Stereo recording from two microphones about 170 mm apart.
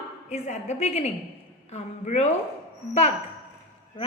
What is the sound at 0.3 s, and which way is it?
A woman's voice, 40° left (ahead or behind).